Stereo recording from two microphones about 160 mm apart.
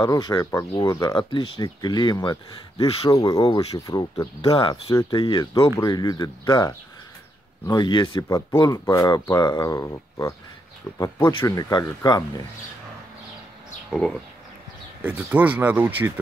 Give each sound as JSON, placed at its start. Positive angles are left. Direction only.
{"t": 0.0, "sound": "speech", "side_deg": 25}
{"t": 8.3, "sound": "speech", "side_deg": 15}
{"t": 13.8, "sound": "speech", "side_deg": 5}
{"t": 15.0, "sound": "speech", "side_deg": -10}